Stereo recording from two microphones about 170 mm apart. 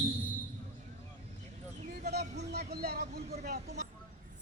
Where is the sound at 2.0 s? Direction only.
70° right (ahead or behind).